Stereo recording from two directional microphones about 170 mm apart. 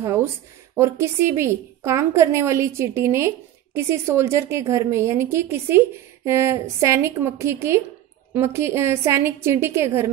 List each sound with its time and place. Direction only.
0.0 s a woman's voice: 15° right (ahead or behind)